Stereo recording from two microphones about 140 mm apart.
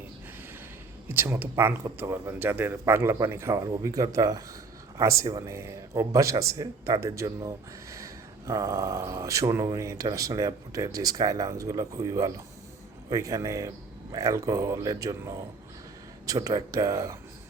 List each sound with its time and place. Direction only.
1.0 s speech: 15° right (ahead or behind)